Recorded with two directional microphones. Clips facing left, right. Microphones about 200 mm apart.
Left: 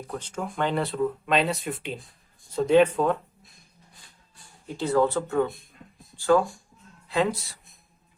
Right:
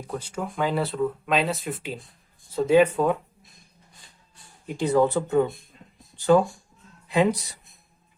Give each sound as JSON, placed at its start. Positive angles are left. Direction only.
{"t": 0.1, "sound": "speech", "side_deg": -10}
{"t": 4.6, "sound": "speech", "side_deg": -15}